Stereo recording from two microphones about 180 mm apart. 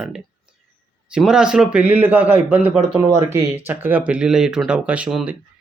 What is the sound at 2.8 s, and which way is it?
Speech, 30° right (ahead or behind).